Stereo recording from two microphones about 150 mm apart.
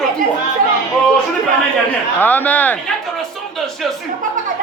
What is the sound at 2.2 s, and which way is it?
Speech, 10° left (ahead or behind).